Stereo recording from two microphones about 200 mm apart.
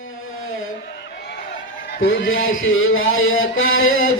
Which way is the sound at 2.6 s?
80° left.